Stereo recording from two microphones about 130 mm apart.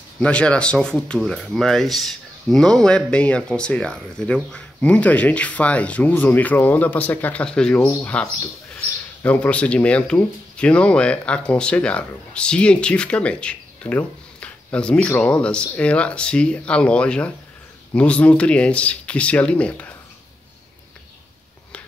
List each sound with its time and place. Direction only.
0.2 s speech: 10° left (ahead or behind)